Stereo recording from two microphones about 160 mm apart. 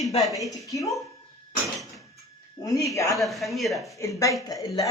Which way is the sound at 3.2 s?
Centre (ahead or behind).